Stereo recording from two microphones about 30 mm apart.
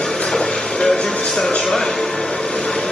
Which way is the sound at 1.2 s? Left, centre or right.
Left.